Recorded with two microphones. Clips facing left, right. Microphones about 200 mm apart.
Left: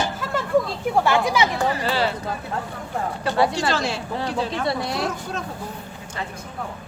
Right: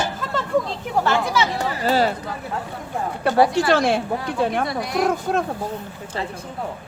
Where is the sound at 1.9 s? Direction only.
45° right (ahead or behind).